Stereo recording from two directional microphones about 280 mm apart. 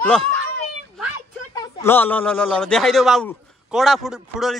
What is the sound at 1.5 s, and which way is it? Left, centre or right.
A man's voice, centre.